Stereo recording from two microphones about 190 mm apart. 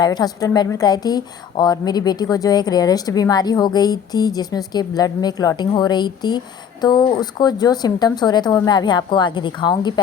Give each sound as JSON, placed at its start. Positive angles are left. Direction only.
{"t": 0.0, "sound": "a woman's voice", "side_deg": 20}